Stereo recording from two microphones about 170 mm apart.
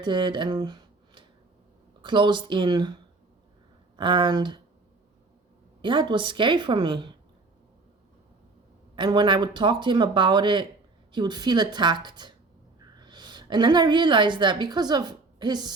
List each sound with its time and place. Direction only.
0.0 s speech: 25° right (ahead or behind)
3.9 s speech: 30° right (ahead or behind)
5.8 s speech: 25° right (ahead or behind)
9.0 s a woman's voice: 30° right (ahead or behind)